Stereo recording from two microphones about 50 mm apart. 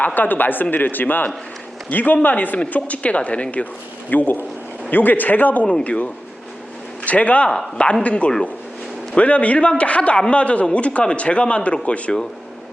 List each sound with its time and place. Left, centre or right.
0.0 s a man's voice: left